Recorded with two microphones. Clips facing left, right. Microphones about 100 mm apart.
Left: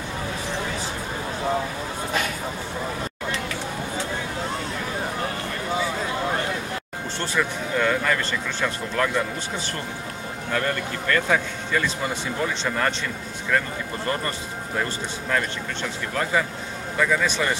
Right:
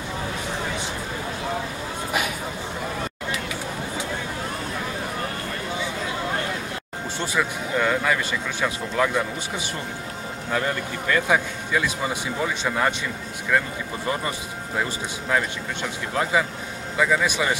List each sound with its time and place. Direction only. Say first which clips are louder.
7.2 s speech: even; 10° right (ahead or behind)
10.5 s speech: even; 10° right (ahead or behind)
14.0 s speech: right 1 dB; 10° right (ahead or behind)